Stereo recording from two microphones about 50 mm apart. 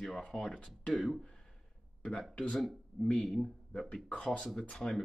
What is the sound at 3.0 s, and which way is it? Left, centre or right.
Speech, left.